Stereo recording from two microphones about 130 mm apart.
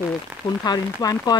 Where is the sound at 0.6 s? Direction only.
30° left (ahead or behind).